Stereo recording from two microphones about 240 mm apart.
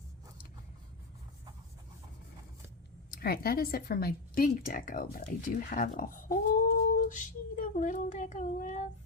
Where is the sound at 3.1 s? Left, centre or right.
Left.